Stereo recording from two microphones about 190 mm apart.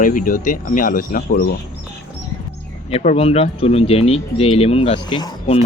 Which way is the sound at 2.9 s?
35° left (ahead or behind).